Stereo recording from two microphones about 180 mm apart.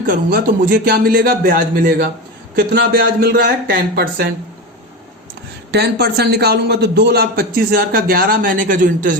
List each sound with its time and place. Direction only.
0.1 s a man's voice: 50° right (ahead or behind)
5.7 s a man's voice: 65° right (ahead or behind); by 9.1 s 45° right (ahead or behind)